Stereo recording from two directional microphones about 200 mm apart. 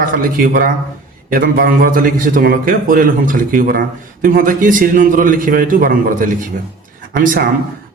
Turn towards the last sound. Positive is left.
turn(degrees=-45)  # may be behind; listen again after turning